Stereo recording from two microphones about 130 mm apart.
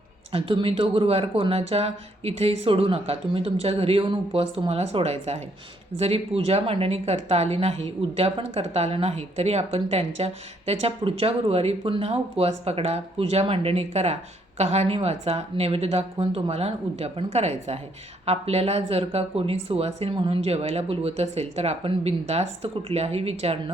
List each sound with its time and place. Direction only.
0.3 s speech: 45° right (ahead or behind)